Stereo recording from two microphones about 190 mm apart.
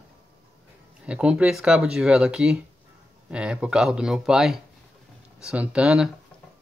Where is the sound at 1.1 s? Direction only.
5° right (ahead or behind).